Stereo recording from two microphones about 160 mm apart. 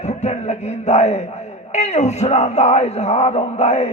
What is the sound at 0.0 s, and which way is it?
A man's voice, 45° left (ahead or behind).